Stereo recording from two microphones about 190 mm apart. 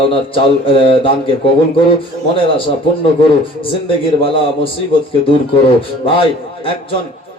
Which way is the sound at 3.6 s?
25° left (ahead or behind).